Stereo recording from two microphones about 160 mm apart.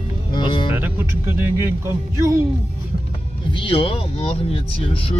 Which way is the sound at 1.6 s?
15° right (ahead or behind).